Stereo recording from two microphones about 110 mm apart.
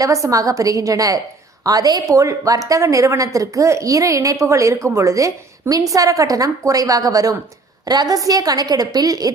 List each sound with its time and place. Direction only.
0.0 s a woman's voice: 30° right (ahead or behind)